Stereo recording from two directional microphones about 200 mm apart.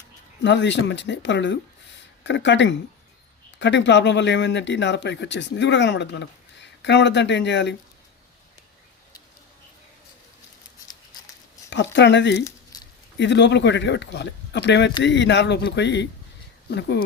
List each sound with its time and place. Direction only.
0.4 s speech: 60° left (ahead or behind)
11.7 s speech: 60° left (ahead or behind)
12.5 s a sound: 20° left (ahead or behind)
13.1 s speech: 60° left (ahead or behind)